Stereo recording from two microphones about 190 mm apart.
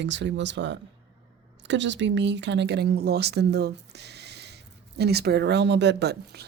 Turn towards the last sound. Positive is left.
turn(degrees=-60)  # may be behind; listen again after turning